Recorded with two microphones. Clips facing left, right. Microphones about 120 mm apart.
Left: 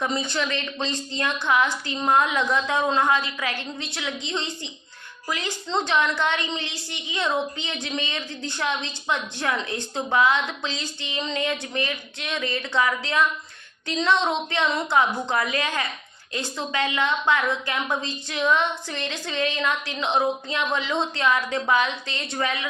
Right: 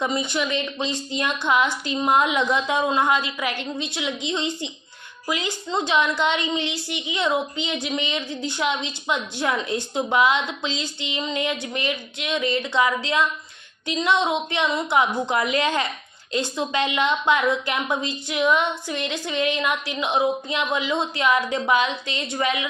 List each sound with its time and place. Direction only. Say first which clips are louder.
0.0 s a woman's voice: right 2 dB; 15° right (ahead or behind)